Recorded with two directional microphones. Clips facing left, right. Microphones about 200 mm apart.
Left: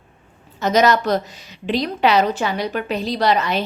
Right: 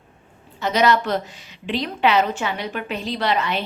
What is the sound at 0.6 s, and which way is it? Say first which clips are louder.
A woman's voice: left 3 dB; 45° left (ahead or behind).